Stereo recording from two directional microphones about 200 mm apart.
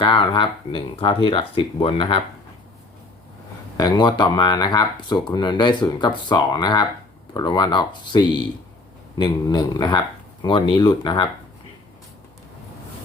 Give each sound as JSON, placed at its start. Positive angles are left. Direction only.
{"t": 0.0, "sound": "speech", "side_deg": 25}
{"t": 3.8, "sound": "speech", "side_deg": 20}